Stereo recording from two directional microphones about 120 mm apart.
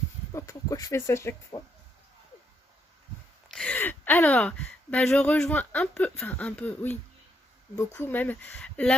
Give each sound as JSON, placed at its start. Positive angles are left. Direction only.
{"t": 0.3, "sound": "speech", "side_deg": 25}
{"t": 3.5, "sound": "a sound", "side_deg": 5}
{"t": 3.8, "sound": "speech", "side_deg": 15}